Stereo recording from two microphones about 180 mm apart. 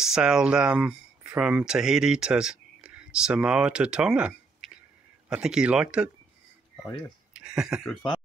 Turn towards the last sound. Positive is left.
turn(degrees=0)  # may be behind; listen again after turning